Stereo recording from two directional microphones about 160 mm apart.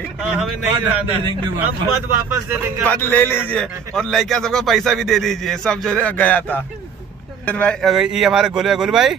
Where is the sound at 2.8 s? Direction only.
10° left (ahead or behind).